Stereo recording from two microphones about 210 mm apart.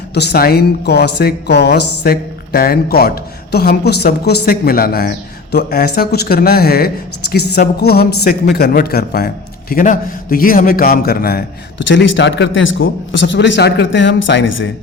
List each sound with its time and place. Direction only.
0.1 s speech: 50° left (ahead or behind)